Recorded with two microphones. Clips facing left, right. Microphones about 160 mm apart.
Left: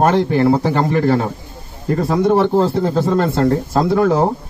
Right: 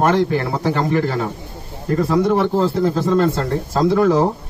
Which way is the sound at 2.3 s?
35° left (ahead or behind).